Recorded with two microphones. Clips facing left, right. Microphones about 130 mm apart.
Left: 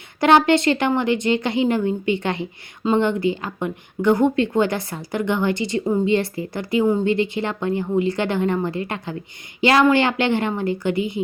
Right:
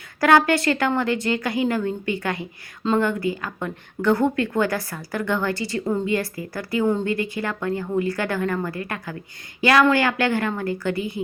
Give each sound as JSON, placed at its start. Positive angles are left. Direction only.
{"t": 0.2, "sound": "speech", "side_deg": 25}